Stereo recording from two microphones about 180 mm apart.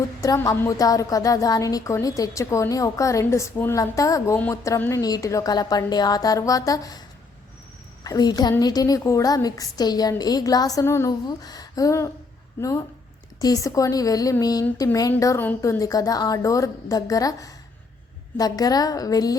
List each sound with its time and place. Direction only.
0.2 s a woman's voice: 20° left (ahead or behind)
8.0 s a woman's voice: 20° left (ahead or behind)